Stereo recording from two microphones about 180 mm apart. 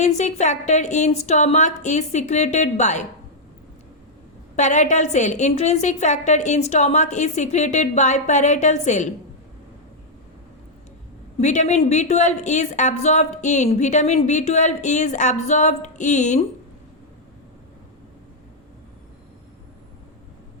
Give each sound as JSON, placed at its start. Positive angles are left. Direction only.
{"t": 0.0, "sound": "a woman's voice", "side_deg": 40}
{"t": 4.5, "sound": "a woman's voice", "side_deg": 40}
{"t": 11.3, "sound": "a woman's voice", "side_deg": 40}